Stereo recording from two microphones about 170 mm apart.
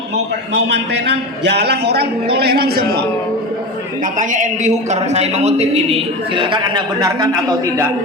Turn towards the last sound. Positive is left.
turn(degrees=-15)  # may be behind; listen again after turning